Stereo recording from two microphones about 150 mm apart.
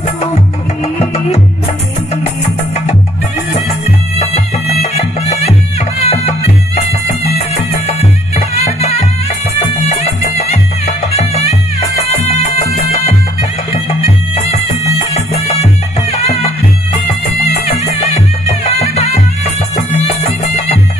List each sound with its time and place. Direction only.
4.2 s music: 45° left (ahead or behind)
7.8 s music: 45° left (ahead or behind)
9.6 s music: 45° left (ahead or behind)
13.8 s music: 40° left (ahead or behind)
18.0 s music: 40° left (ahead or behind)